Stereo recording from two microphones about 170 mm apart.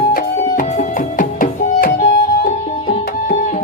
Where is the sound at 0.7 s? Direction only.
50° left (ahead or behind).